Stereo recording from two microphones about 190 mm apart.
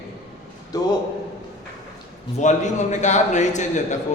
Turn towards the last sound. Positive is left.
turn(degrees=40)  # may be behind; listen again after turning